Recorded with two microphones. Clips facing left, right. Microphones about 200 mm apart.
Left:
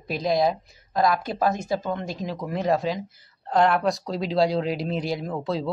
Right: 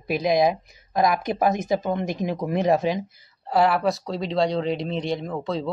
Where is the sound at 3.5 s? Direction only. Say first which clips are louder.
Even; 5° right (ahead or behind).